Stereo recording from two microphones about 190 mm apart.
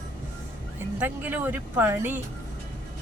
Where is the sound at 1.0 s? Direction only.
10° right (ahead or behind).